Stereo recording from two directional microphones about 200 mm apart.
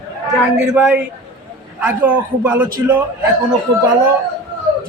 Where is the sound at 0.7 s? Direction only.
5° right (ahead or behind).